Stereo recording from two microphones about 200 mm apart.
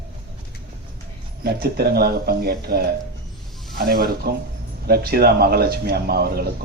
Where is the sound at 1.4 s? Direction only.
50° right (ahead or behind).